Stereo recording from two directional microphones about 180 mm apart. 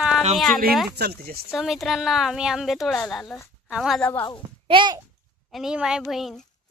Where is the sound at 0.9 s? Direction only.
60° right (ahead or behind).